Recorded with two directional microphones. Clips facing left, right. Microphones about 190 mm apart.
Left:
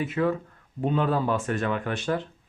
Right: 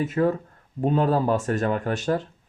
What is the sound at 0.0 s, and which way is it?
Speech, 45° right (ahead or behind).